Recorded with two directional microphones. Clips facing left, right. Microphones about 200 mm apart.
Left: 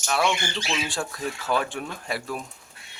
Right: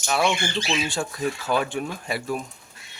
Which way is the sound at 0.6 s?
15° right (ahead or behind).